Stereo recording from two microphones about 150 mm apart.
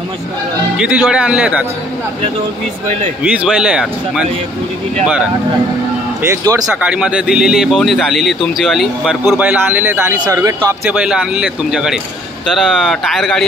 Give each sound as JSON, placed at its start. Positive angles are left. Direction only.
{"t": 0.7, "sound": "a man's voice", "side_deg": -5}
{"t": 3.3, "sound": "speech", "side_deg": -5}
{"t": 6.2, "sound": "speech", "side_deg": -20}
{"t": 6.7, "sound": "a man's voice", "side_deg": -10}
{"t": 10.9, "sound": "speech", "side_deg": -5}